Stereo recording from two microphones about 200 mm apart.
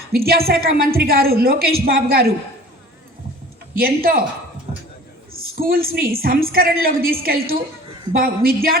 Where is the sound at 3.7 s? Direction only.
45° right (ahead or behind).